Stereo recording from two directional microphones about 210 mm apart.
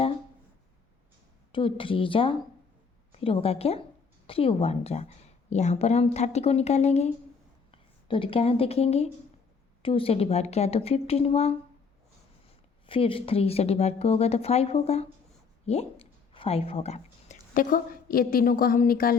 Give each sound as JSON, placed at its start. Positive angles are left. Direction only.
{"t": 1.5, "sound": "a woman's voice", "side_deg": 25}
{"t": 12.8, "sound": "a woman's voice", "side_deg": 25}
{"t": 15.6, "sound": "a sound", "side_deg": 30}
{"t": 17.5, "sound": "a woman's voice", "side_deg": 40}